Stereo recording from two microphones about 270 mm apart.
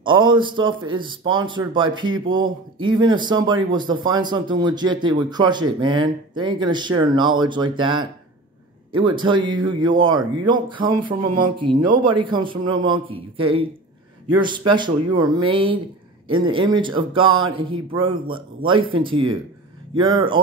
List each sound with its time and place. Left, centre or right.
0.0 s speech: centre
11.2 s speech: right
12.0 s speech: centre
14.7 s speech: centre